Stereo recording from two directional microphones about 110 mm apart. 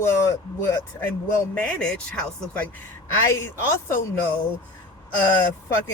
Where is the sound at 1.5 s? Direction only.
10° left (ahead or behind).